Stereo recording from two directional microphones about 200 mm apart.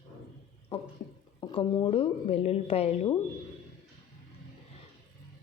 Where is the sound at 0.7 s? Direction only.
30° left (ahead or behind).